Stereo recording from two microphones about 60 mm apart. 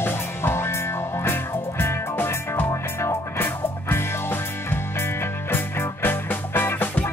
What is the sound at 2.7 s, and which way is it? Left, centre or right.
Music, left.